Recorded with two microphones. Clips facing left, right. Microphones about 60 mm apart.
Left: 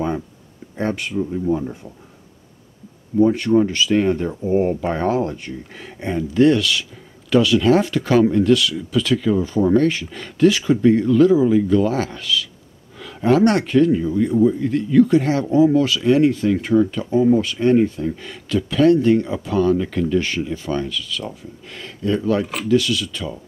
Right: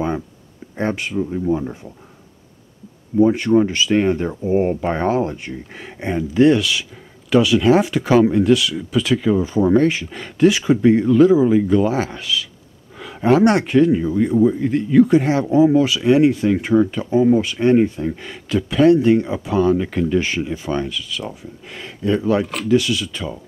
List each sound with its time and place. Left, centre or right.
0.8 s speech: centre
3.5 s speech: centre
13.0 s a sound: right
13.4 s speech: centre